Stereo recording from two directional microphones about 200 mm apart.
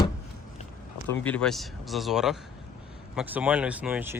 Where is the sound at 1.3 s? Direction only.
5° left (ahead or behind).